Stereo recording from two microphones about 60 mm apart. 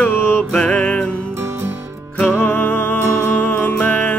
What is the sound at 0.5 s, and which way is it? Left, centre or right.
Music, centre.